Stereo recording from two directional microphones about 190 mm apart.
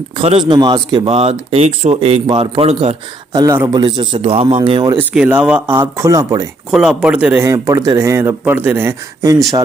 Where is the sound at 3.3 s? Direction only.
15° right (ahead or behind).